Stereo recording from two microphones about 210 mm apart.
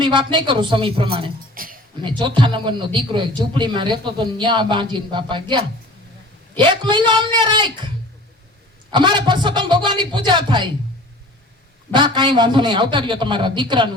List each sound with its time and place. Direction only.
0.0 s a man's voice: 20° right (ahead or behind)
1.5 s a sound: 40° right (ahead or behind)
2.0 s a man's voice: 20° right (ahead or behind)
8.9 s a man's voice: 20° right (ahead or behind)
11.9 s a man's voice: 20° right (ahead or behind)